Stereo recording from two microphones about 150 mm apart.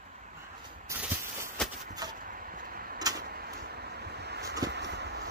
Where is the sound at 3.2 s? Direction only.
90° right.